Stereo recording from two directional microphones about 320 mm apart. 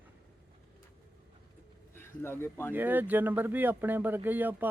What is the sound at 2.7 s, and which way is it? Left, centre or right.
Speech, centre.